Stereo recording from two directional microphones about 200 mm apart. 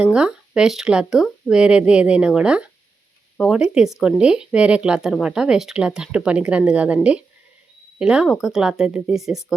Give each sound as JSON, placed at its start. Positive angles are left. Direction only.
{"t": 0.0, "sound": "speech", "side_deg": -5}